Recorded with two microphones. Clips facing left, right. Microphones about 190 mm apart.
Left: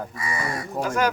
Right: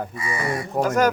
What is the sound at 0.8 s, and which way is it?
Speech, 65° right (ahead or behind).